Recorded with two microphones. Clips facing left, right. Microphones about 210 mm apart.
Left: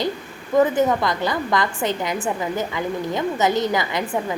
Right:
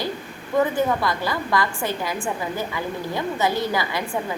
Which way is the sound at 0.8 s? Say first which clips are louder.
Left 3 dB; 20° left (ahead or behind).